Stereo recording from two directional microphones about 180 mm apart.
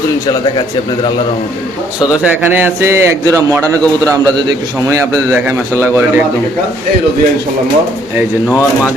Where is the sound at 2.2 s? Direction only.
10° right (ahead or behind).